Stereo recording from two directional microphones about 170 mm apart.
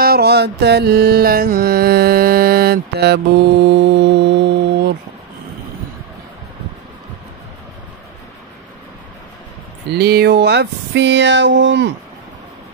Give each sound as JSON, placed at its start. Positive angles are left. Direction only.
{"t": 0.0, "sound": "music", "side_deg": -65}
{"t": 3.7, "sound": "music", "side_deg": -90}
{"t": 9.8, "sound": "speech", "side_deg": -70}